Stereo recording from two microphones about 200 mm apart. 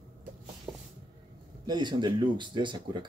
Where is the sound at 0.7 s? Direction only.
20° right (ahead or behind).